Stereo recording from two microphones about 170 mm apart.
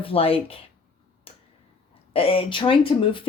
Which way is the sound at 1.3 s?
35° left (ahead or behind).